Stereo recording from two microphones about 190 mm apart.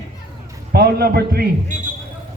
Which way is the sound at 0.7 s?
55° right (ahead or behind).